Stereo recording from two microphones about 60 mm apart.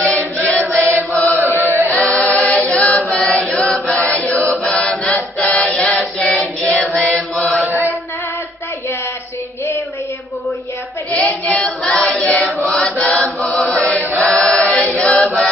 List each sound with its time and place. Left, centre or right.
0.4 s chant: left
1.4 s chant: right
2.0 s singing: centre
2.7 s chant: left
6.1 s mantra: centre
11.1 s choir: left
13.0 s chant: centre
14.6 s choir: centre